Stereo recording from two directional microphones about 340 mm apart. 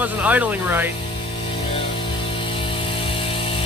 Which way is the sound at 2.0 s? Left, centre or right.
Centre.